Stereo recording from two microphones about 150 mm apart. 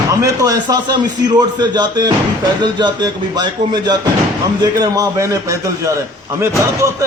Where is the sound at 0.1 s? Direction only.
20° right (ahead or behind).